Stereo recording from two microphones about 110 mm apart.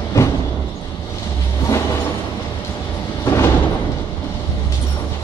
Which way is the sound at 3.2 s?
25° left (ahead or behind).